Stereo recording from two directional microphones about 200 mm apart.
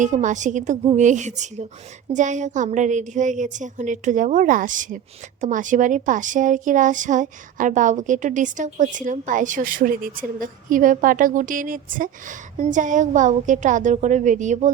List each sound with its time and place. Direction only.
0.0 s speech: 40° right (ahead or behind)